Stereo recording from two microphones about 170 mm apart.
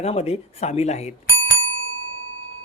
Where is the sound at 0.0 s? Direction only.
35° left (ahead or behind).